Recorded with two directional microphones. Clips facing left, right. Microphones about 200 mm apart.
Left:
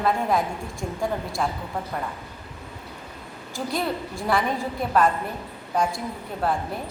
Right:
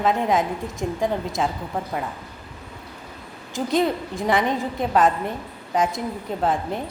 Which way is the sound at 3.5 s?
20° right (ahead or behind).